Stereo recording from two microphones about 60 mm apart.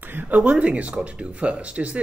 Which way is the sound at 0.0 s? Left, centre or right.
Right.